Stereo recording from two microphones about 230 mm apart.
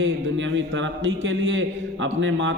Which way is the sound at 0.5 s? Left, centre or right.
Right.